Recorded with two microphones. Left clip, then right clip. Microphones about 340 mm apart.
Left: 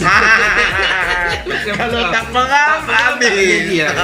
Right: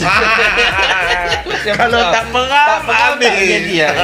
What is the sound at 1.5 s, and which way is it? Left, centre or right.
Speech, right.